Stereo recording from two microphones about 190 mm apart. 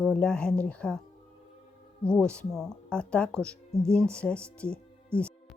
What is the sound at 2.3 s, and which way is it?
Speech, 5° left (ahead or behind).